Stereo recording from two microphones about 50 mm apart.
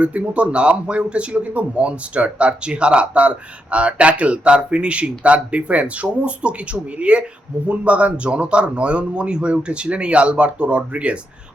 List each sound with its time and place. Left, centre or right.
0.0 s a man's voice: right